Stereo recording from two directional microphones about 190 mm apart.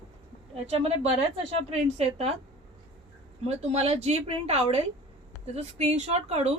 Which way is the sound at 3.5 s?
35° right (ahead or behind).